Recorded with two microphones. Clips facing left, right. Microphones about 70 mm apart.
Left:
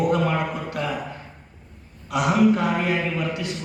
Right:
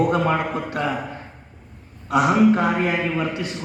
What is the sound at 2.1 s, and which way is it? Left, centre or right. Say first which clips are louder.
A man's voice: right 3 dB; right.